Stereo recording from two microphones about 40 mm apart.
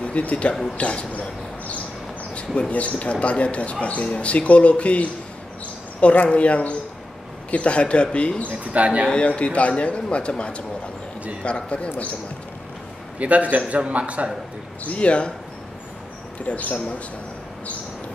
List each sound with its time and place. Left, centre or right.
0.0 s speech: left
0.7 s a sound: left
2.7 s speech: left
6.2 s speech: left
8.7 s a man's voice: right
9.1 s speech: left
13.2 s a man's voice: right
14.9 s speech: left
16.4 s speech: left